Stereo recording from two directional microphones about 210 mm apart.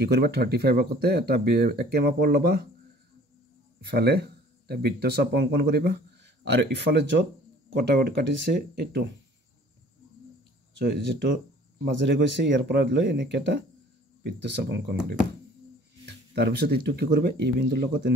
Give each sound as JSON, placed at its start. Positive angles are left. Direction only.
{"t": 0.0, "sound": "speech", "side_deg": -50}
{"t": 3.9, "sound": "speech", "side_deg": -50}
{"t": 10.8, "sound": "speech", "side_deg": -55}
{"t": 16.3, "sound": "speech", "side_deg": -50}